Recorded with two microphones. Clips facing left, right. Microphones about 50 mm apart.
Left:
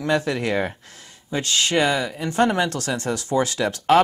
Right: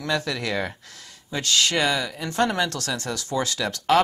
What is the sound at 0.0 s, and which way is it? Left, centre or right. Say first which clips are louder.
Speech: left 4 dB; left.